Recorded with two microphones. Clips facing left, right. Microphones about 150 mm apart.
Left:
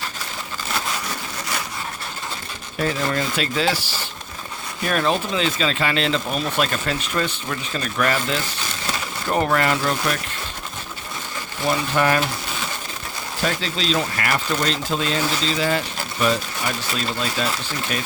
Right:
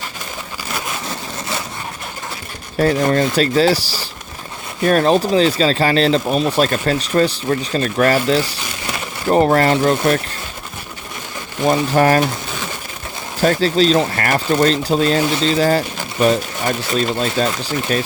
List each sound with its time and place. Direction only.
2.7 s speech: 40° right (ahead or behind)
11.7 s speech: 40° right (ahead or behind)
13.4 s speech: 45° right (ahead or behind)